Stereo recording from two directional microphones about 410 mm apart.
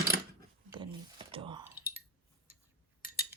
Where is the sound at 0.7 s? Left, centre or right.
Centre.